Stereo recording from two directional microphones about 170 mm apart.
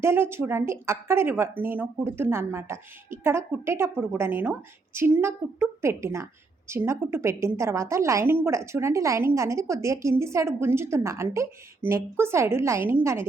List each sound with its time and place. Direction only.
0.0 s a woman's voice: 15° right (ahead or behind)